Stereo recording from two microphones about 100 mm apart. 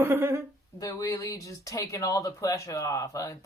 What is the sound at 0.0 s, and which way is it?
Speech, 20° right (ahead or behind).